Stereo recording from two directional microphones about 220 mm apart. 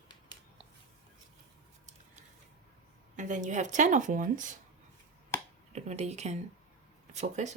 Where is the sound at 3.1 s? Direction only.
35° right (ahead or behind).